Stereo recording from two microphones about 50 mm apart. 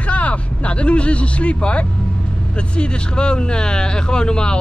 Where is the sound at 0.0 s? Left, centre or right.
Left.